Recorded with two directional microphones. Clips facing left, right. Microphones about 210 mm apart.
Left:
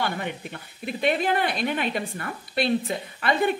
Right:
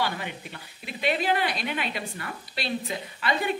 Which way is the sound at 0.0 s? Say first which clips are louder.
Left 2 dB; 50° left (ahead or behind).